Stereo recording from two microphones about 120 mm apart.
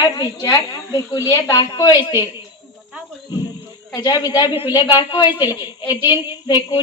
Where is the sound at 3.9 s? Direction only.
35° left (ahead or behind).